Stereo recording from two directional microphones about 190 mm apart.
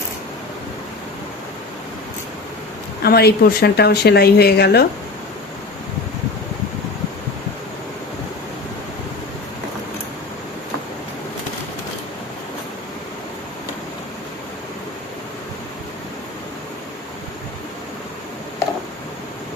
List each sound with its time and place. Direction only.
3.0 s speech: 55° left (ahead or behind)